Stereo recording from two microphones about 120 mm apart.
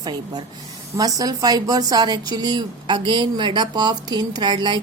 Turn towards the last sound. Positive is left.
turn(degrees=-40)  # may be behind; listen again after turning